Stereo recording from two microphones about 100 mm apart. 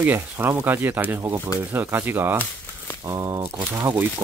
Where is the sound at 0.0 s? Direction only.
20° right (ahead or behind).